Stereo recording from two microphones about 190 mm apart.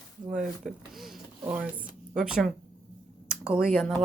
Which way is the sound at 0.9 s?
5° right (ahead or behind).